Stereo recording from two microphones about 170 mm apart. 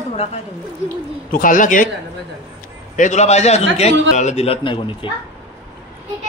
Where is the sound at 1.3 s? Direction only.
50° left (ahead or behind).